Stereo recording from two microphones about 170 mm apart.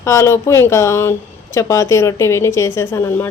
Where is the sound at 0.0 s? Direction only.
15° left (ahead or behind).